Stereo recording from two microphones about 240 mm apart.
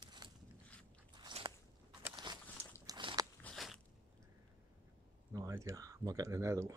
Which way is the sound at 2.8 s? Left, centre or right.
Centre.